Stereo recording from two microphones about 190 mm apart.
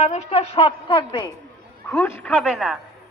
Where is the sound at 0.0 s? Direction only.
35° left (ahead or behind).